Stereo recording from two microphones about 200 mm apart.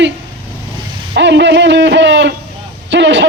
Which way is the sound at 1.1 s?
60° right (ahead or behind).